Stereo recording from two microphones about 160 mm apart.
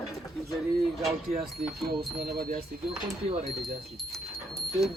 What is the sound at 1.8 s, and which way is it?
Speech, 75° right (ahead or behind).